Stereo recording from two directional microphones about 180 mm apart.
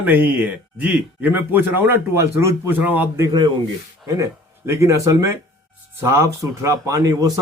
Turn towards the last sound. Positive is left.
turn(degrees=-20)  # may be behind; listen again after turning